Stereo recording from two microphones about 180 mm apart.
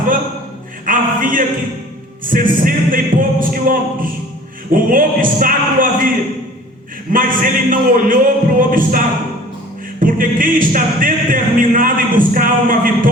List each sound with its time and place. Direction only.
0.9 s music: 50° right (ahead or behind)
7.1 s music: 50° right (ahead or behind)